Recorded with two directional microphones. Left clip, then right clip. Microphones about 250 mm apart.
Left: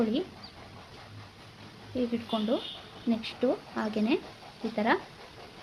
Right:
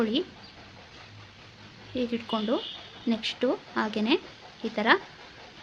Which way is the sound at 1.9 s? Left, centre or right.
Centre.